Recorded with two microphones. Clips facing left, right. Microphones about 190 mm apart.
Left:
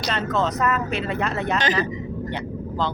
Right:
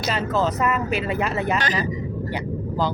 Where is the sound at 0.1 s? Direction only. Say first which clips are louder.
Right 1 dB; 5° right (ahead or behind).